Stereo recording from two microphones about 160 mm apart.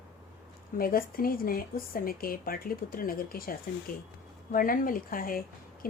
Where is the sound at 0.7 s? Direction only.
65° left (ahead or behind).